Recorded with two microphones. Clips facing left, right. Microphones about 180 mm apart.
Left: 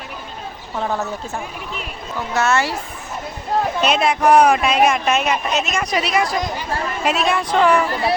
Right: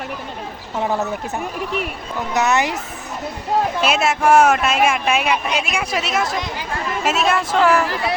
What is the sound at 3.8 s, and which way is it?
A man's voice, 5° right (ahead or behind).